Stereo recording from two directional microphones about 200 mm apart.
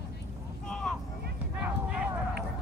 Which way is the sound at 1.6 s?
5° right (ahead or behind).